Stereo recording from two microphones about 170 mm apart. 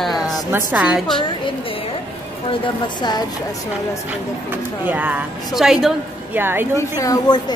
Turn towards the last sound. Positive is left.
turn(degrees=20)  # may be behind; listen again after turning